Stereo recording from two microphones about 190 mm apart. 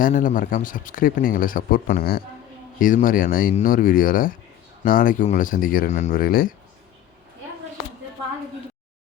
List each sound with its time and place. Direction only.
0.0 s speech: 45° left (ahead or behind)